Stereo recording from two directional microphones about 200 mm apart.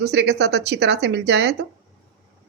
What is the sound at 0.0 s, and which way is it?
Speech, 55° right (ahead or behind).